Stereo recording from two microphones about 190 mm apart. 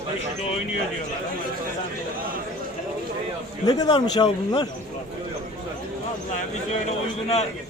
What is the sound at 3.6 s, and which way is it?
A man's voice, 20° left (ahead or behind).